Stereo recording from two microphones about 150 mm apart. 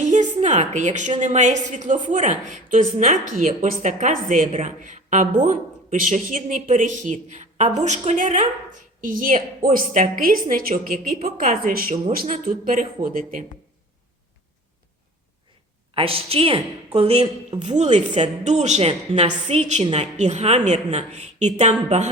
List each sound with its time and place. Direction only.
0.0 s a sound: 55° right (ahead or behind)
1.2 s a woman's voice: 50° right (ahead or behind)
16.0 s a woman's voice: 40° right (ahead or behind)